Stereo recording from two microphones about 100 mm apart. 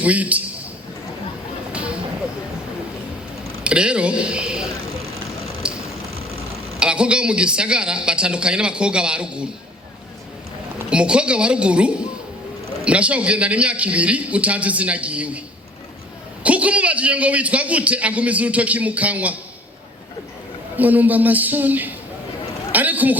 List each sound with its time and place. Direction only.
0.0 s a man's voice: 15° right (ahead or behind)
1.7 s a sound: 10° right (ahead or behind)
3.6 s speech: 10° right (ahead or behind)
5.6 s a sound: 10° right (ahead or behind)
6.7 s a man's voice: 10° right (ahead or behind)
10.8 s a man's voice: 10° right (ahead or behind)
16.4 s a man's voice: 15° right (ahead or behind)
20.7 s a man's voice: 15° right (ahead or behind)
22.7 s a sound: 15° right (ahead or behind)